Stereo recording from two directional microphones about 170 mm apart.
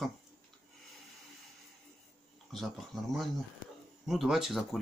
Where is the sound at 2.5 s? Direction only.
Centre (ahead or behind).